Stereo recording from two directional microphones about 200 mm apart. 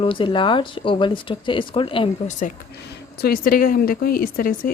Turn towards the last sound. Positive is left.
turn(degrees=45)  # may be behind; listen again after turning